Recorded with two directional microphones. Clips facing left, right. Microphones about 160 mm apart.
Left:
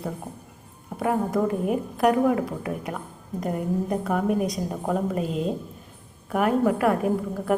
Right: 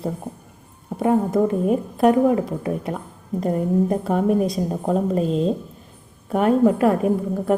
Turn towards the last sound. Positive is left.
turn(degrees=-25)  # may be behind; listen again after turning